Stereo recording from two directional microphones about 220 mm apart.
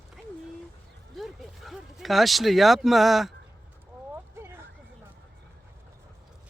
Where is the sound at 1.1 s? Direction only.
Centre (ahead or behind).